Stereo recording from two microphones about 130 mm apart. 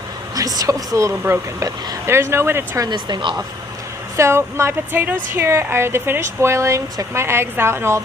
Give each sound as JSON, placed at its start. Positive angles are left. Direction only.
{"t": 0.3, "sound": "speech", "side_deg": -30}
{"t": 2.9, "sound": "a woman's voice", "side_deg": -40}
{"t": 4.2, "sound": "speech", "side_deg": -20}